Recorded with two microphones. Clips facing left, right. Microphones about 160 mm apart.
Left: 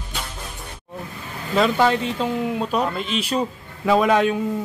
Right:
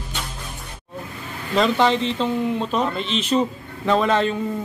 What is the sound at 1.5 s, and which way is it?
Speech, 5° left (ahead or behind).